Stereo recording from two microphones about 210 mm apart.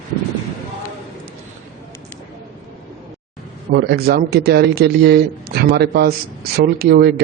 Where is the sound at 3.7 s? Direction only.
50° right (ahead or behind).